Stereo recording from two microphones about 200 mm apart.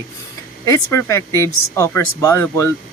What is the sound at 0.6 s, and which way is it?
Speech, 15° left (ahead or behind).